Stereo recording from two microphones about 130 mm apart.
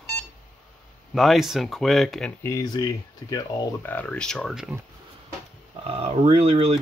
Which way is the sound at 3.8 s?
15° left (ahead or behind).